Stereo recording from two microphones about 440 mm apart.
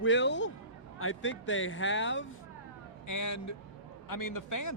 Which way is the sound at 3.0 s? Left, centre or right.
Left.